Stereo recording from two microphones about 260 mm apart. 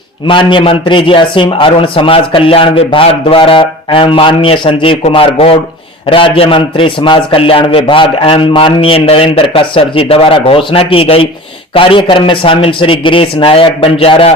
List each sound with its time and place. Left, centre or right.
0.3 s a man's voice: centre